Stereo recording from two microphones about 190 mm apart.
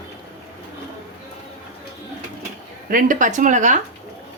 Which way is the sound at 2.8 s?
45° right (ahead or behind).